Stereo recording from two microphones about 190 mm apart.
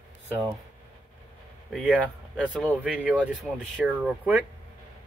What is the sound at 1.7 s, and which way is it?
Speech, 5° right (ahead or behind).